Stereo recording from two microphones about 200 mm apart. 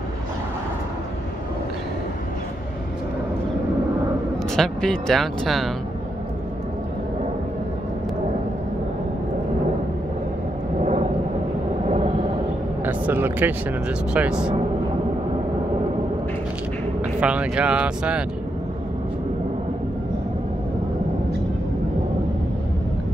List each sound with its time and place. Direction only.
4.6 s speech: centre (ahead or behind)
10.8 s a sound: 35° right (ahead or behind)
12.8 s speech: 10° right (ahead or behind)
17.2 s speech: 5° right (ahead or behind)